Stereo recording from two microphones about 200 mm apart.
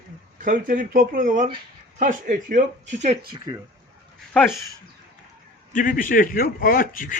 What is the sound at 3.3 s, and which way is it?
Speech, 20° right (ahead or behind).